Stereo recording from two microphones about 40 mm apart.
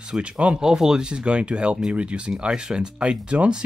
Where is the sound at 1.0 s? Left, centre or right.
Right.